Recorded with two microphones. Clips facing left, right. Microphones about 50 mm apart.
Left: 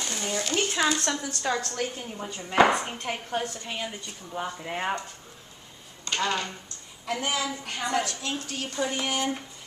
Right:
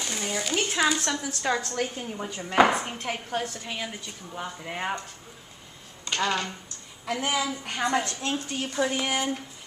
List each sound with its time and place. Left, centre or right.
0.0 s speech: centre
6.0 s speech: centre
8.0 s a woman's voice: right
8.5 s speech: centre